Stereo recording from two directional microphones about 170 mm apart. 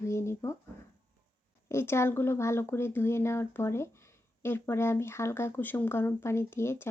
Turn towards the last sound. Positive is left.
turn(degrees=15)  # may be behind; listen again after turning